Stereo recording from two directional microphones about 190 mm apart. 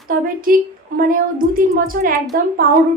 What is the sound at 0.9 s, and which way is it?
Speech, 50° right (ahead or behind).